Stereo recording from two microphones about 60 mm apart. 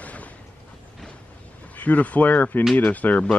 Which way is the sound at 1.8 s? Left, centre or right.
Left.